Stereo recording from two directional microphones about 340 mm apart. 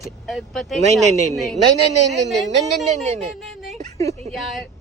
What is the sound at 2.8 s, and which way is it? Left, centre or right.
Speech, centre.